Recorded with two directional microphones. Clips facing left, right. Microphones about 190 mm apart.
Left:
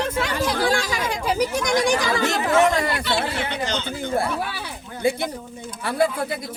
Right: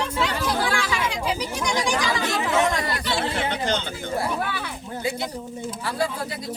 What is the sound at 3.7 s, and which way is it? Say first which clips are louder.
Speech: right 2 dB; 55° right (ahead or behind).